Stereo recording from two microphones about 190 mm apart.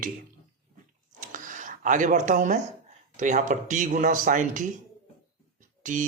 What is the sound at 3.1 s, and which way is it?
Speech, 40° right (ahead or behind).